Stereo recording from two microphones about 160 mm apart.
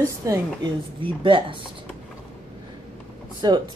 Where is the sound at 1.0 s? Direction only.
30° right (ahead or behind).